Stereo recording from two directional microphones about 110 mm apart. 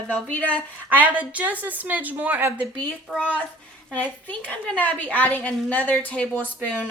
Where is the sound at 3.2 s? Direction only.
15° left (ahead or behind).